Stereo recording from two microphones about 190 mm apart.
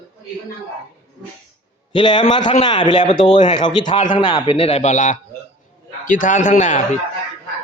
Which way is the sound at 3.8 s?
40° left (ahead or behind).